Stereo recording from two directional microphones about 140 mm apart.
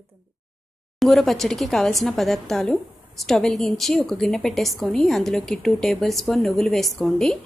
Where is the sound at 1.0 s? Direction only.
Centre (ahead or behind).